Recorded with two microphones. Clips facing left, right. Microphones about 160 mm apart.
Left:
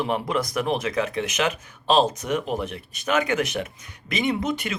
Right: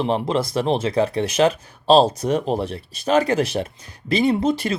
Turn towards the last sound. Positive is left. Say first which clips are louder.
# right 6 dB
turn(degrees=-30)  # may be behind; listen again after turning